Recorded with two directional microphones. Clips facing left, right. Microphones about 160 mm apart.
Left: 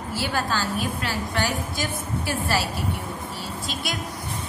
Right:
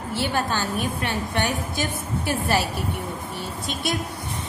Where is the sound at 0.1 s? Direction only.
25° right (ahead or behind).